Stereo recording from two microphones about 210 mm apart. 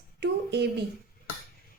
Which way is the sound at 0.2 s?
55° right (ahead or behind).